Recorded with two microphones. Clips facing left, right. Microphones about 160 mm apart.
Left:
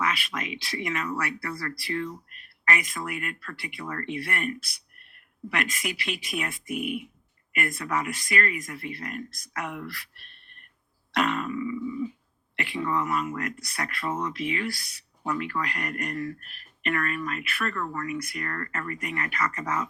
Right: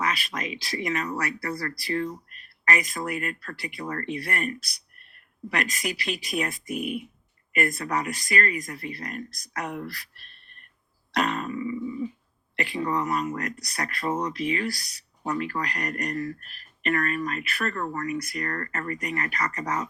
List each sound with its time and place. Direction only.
0.0 s speech: 40° right (ahead or behind)
11.1 s a sound: 40° right (ahead or behind)
12.5 s speech: 40° right (ahead or behind)